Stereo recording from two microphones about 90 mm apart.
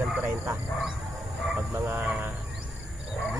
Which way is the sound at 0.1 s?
20° right (ahead or behind).